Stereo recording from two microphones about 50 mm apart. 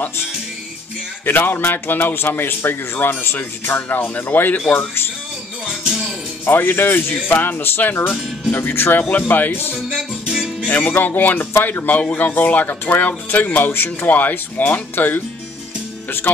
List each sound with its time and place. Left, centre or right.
1.2 s a man's voice: left
3.9 s speech: left
6.4 s a man's voice: left
9.8 s music: right
10.6 s speech: left